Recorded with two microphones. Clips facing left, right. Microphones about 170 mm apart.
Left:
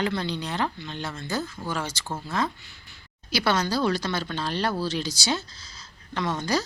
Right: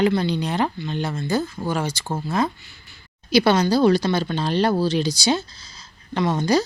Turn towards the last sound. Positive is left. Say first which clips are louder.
# right 7 dB
turn(degrees=-15)  # may be behind; listen again after turning